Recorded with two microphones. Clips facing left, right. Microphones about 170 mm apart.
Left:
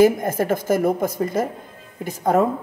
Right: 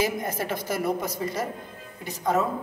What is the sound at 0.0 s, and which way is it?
A woman's voice, 50° left (ahead or behind).